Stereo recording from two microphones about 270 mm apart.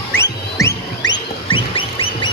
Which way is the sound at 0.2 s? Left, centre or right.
Centre.